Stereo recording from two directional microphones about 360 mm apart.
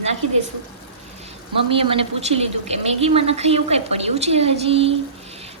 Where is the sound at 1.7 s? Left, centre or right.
Centre.